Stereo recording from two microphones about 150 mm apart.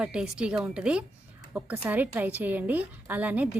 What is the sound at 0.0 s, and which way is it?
A woman's voice, 5° right (ahead or behind).